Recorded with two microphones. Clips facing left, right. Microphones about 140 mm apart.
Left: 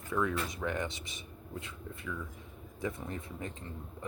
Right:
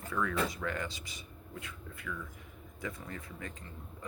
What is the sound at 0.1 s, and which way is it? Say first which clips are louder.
Speech: left 1 dB; 20° left (ahead or behind).